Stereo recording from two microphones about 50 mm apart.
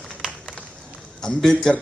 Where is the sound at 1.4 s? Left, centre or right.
Centre.